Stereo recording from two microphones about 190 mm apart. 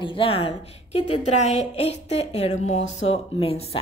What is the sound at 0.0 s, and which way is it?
Speech, 30° left (ahead or behind).